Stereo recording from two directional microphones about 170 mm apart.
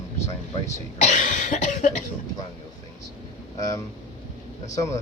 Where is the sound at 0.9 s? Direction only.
45° left (ahead or behind).